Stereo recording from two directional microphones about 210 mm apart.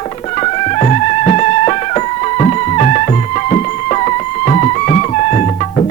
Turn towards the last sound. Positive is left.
turn(degrees=35)  # may be behind; listen again after turning